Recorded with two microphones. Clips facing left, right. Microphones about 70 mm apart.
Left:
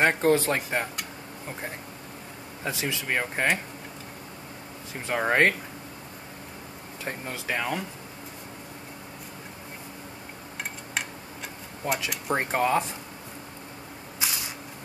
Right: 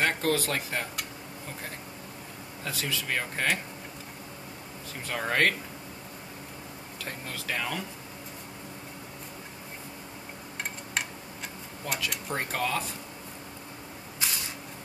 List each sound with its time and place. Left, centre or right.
0.0 s speech: left
2.6 s speech: left
5.0 s speech: left
7.1 s speech: left
11.8 s speech: left